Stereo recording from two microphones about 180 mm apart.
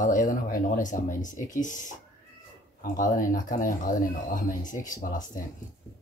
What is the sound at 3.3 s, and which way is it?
Speech, 50° left (ahead or behind).